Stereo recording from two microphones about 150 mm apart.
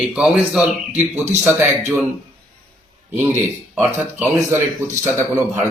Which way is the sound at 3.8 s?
15° right (ahead or behind).